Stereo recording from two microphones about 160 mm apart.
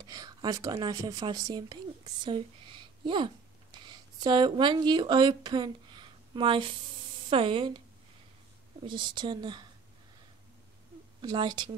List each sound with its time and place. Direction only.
0.0 s speech: 25° right (ahead or behind)
8.8 s speech: 30° right (ahead or behind)
11.1 s speech: 30° right (ahead or behind)